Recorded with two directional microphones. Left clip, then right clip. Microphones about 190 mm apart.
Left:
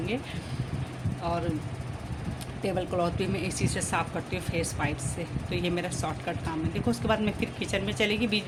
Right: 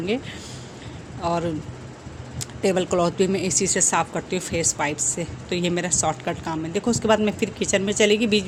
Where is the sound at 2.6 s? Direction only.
30° right (ahead or behind).